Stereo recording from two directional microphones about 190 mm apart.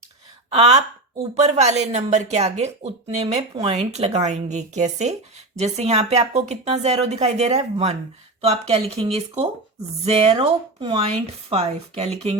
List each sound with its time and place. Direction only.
0.5 s speech: 35° right (ahead or behind)